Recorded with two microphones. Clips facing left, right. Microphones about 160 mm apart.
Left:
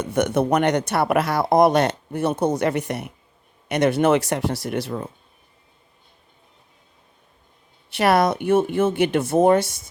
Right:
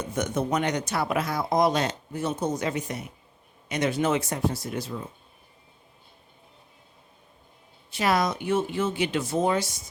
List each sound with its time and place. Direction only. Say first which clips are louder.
0.0 s speech: left 7 dB; 70° left (ahead or behind)
7.9 s speech: left 6 dB; 65° left (ahead or behind)